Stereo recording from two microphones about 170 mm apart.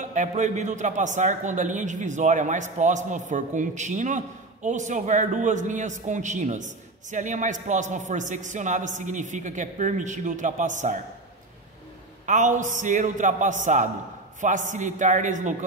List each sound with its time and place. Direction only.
0.0 s a man's voice: 45° right (ahead or behind)
12.3 s a man's voice: 45° right (ahead or behind)